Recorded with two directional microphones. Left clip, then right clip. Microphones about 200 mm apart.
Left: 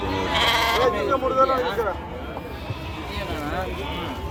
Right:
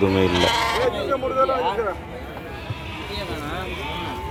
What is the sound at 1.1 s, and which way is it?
Speech, 45° right (ahead or behind).